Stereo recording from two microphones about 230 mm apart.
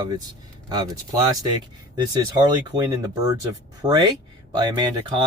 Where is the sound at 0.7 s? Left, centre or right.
Centre.